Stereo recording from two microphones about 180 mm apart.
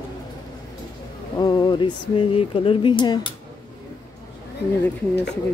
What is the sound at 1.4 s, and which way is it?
Speech, 25° left (ahead or behind).